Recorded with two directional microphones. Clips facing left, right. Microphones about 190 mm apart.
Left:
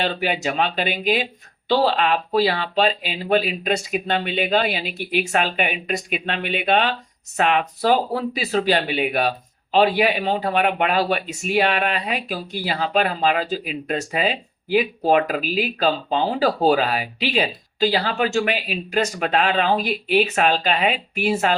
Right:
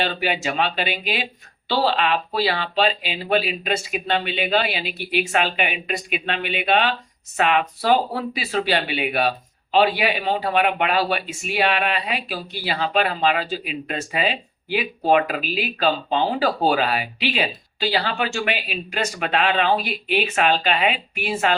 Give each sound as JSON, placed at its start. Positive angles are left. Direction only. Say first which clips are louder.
{"t": 0.0, "sound": "speech", "louder": "left 1 dB", "side_deg": 40}